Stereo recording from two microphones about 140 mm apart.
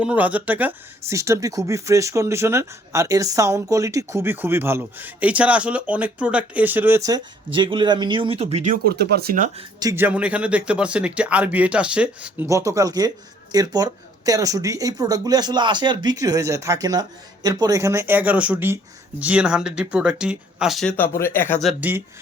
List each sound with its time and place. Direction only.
0.0 s speech: 10° right (ahead or behind)
7.0 s speech: 30° right (ahead or behind); by 8.7 s 50° right (ahead or behind)
8.7 s speech: 85° right
9.9 s speech: 10° right (ahead or behind)
12.5 s speech: 25° right (ahead or behind); by 20.9 s centre (ahead or behind)
20.9 s speech: 15° left (ahead or behind)
21.8 s speech: 15° right (ahead or behind)